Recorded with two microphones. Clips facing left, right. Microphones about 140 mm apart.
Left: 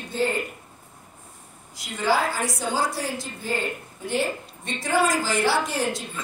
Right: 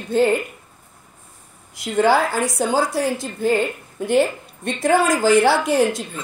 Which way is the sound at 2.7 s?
50° right (ahead or behind).